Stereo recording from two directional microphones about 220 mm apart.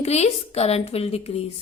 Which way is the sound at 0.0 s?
30° left (ahead or behind).